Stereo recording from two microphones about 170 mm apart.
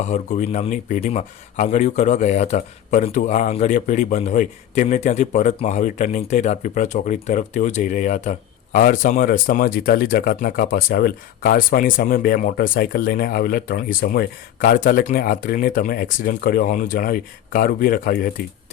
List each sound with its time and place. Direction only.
0.0 s speech: 45° left (ahead or behind)